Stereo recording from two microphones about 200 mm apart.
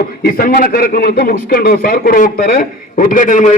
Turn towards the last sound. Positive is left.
turn(degrees=40)  # may be behind; listen again after turning